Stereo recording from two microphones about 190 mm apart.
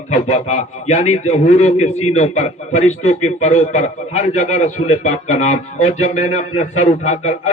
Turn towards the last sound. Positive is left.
turn(degrees=35)  # may be behind; listen again after turning